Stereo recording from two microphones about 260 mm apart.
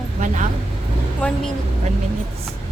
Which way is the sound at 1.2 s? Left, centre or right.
Centre.